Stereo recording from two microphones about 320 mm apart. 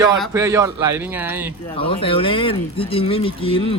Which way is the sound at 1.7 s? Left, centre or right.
Centre.